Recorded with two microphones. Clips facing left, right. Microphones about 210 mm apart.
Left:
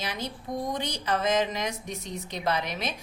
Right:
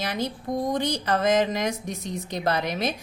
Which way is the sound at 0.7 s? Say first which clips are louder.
Right 5 dB; 40° right (ahead or behind).